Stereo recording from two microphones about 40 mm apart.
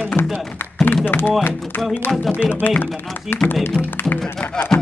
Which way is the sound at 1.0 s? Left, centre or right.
Left.